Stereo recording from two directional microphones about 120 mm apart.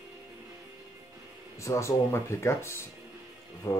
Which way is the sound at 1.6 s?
25° left (ahead or behind).